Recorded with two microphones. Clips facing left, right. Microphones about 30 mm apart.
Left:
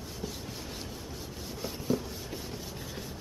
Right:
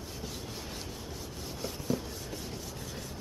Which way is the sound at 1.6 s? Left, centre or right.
Centre.